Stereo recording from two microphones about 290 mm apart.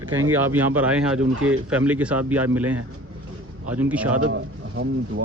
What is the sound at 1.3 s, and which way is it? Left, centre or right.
Speech, right.